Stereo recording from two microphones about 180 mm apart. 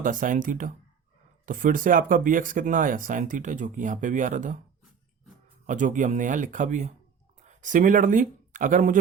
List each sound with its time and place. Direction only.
0.0 s speech: 45° right (ahead or behind)
5.6 s speech: 45° right (ahead or behind)